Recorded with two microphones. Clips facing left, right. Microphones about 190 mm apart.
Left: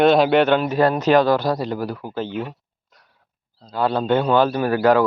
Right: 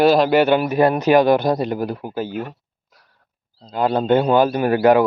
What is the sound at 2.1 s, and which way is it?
Speech, 10° right (ahead or behind).